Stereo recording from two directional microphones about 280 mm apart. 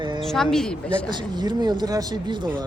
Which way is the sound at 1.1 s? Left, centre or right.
Centre.